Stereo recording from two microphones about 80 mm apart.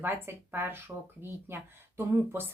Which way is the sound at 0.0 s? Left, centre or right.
Right.